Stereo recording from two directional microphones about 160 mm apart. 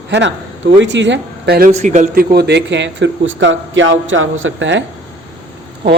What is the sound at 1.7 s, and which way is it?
Speech, 45° right (ahead or behind).